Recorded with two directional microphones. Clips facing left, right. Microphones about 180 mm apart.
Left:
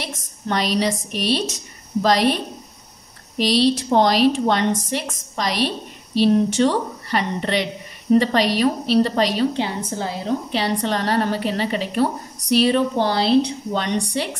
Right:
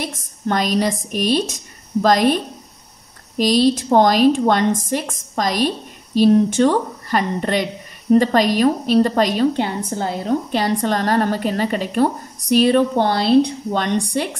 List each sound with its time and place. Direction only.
0.0 s a woman's voice: 45° right (ahead or behind)